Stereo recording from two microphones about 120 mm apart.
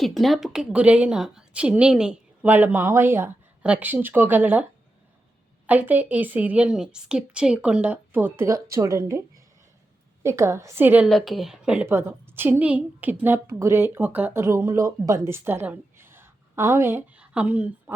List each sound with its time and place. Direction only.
0.0 s a woman's voice: centre (ahead or behind); by 4.6 s 15° right (ahead or behind)
5.6 s a woman's voice: 15° right (ahead or behind)
11.0 s a woman's voice: centre (ahead or behind)
11.9 s a woman's voice: 20° right (ahead or behind)